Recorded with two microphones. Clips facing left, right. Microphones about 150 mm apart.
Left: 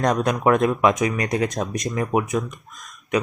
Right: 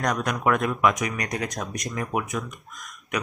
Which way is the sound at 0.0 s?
25° left (ahead or behind).